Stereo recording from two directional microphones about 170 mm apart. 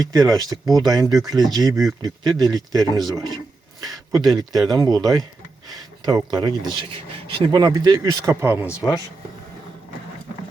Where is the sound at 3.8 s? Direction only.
20° right (ahead or behind).